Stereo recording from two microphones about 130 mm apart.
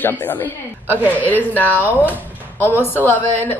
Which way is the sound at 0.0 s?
15° left (ahead or behind).